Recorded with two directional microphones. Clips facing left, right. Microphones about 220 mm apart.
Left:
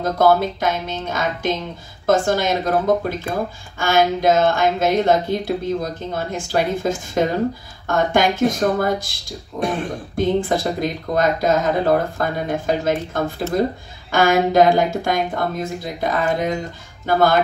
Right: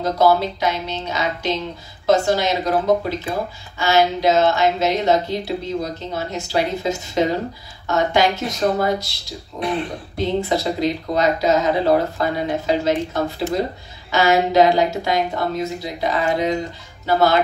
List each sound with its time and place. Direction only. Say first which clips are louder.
0.0 s speech: left 1 dB; 50° left (ahead or behind)